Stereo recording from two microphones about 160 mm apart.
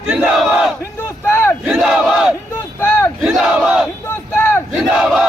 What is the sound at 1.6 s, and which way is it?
Battle cry, 5° right (ahead or behind).